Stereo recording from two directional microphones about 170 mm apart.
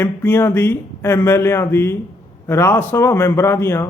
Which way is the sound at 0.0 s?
10° left (ahead or behind).